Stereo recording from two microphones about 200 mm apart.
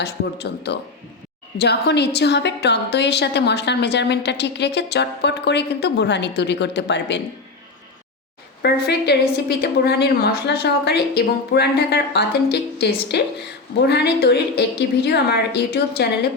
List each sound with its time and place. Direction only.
0.0 s a woman's voice: 55° left (ahead or behind)
8.6 s a woman's voice: 55° left (ahead or behind)